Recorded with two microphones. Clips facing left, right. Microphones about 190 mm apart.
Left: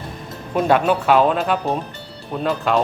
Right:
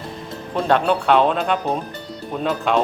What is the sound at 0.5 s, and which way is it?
Speech, 5° left (ahead or behind).